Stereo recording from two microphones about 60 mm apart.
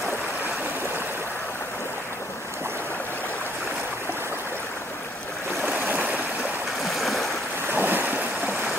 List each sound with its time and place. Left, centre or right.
5.7 s stream: right
6.8 s stream: centre
7.7 s a sound: right